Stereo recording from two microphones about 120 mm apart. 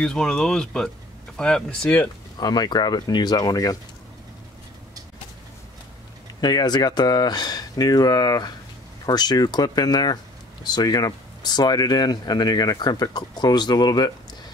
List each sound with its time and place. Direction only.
0.0 s speech: 5° left (ahead or behind)
2.3 s speech: 35° left (ahead or behind)
6.4 s speech: 35° left (ahead or behind)